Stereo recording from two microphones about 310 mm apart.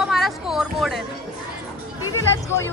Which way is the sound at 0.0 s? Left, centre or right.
Centre.